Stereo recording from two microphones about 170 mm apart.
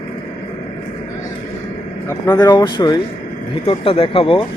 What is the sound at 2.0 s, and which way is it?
A man's voice, 20° left (ahead or behind).